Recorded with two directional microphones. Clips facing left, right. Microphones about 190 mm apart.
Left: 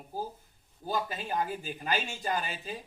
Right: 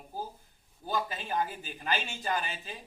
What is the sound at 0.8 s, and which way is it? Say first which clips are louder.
Speech: left 1 dB; 40° left (ahead or behind).